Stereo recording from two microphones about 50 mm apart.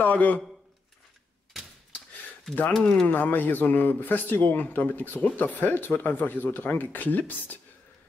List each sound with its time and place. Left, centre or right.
0.0 s speech: left
2.7 s speech: centre
3.1 s speech: left